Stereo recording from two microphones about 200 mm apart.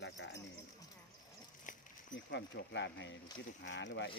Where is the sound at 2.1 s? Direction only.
60° left (ahead or behind).